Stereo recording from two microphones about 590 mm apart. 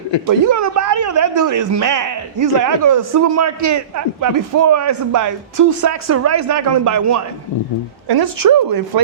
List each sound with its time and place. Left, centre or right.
0.3 s speech: right